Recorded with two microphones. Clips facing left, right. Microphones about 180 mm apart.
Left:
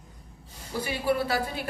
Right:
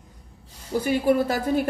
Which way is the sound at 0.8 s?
45° right (ahead or behind).